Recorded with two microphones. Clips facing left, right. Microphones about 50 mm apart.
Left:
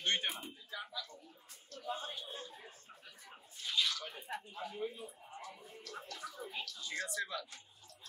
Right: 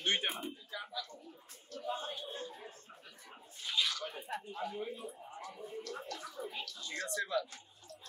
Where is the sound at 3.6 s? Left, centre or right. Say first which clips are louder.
Right 1 dB; centre.